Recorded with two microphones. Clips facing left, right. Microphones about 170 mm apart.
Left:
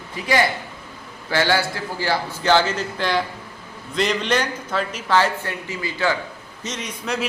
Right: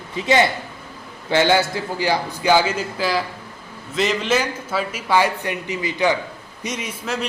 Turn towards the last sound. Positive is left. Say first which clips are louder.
# right 1 dB
turn(degrees=-10)  # may be behind; listen again after turning